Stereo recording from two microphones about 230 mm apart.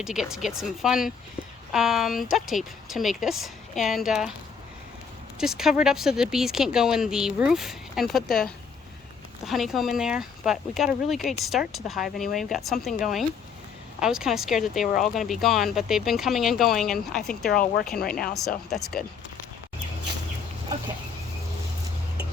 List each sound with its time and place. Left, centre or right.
0.0 s speech: centre
5.4 s speech: centre
17.9 s speech: left
18.3 s speech: centre